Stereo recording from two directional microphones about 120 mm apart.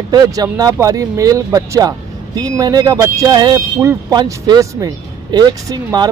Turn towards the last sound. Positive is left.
turn(degrees=-30)  # may be behind; listen again after turning